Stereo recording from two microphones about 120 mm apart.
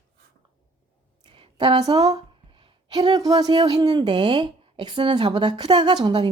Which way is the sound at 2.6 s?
40° right (ahead or behind).